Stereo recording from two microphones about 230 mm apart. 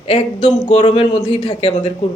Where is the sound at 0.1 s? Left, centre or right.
Centre.